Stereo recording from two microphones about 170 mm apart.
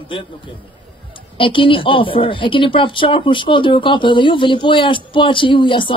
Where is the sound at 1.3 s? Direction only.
30° left (ahead or behind).